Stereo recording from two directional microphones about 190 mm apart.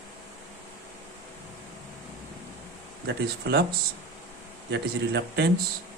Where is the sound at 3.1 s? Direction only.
60° right (ahead or behind).